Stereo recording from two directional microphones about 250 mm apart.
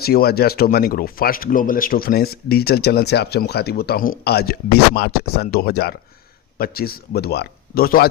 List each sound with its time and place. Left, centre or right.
0.0 s speech: left